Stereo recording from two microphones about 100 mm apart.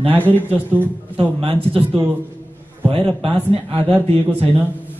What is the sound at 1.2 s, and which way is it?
A man's voice, 75° right (ahead or behind).